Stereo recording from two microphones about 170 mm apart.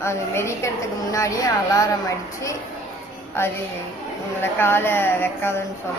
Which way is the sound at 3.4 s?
15° left (ahead or behind).